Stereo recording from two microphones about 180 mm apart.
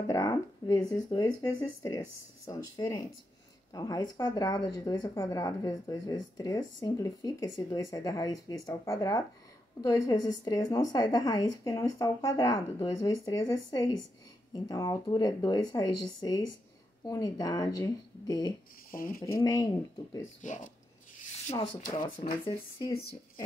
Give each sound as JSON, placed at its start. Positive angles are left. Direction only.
{"t": 0.1, "sound": "speech", "side_deg": 20}
{"t": 18.9, "sound": "speech", "side_deg": 50}
{"t": 19.4, "sound": "speech", "side_deg": 20}
{"t": 20.4, "sound": "speech", "side_deg": 45}
{"t": 22.2, "sound": "speech", "side_deg": 20}